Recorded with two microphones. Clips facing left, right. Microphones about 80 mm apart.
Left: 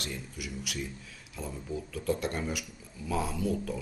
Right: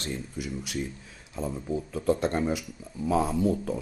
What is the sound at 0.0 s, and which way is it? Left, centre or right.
Speech, right.